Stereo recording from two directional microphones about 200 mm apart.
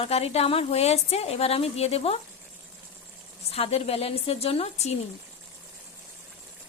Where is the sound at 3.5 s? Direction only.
30° left (ahead or behind).